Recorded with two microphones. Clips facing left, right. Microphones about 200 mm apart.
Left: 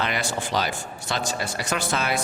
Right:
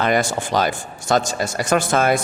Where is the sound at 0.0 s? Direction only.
45° right (ahead or behind).